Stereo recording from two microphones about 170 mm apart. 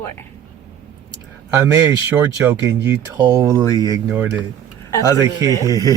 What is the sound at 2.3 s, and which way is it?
Speech, 15° right (ahead or behind).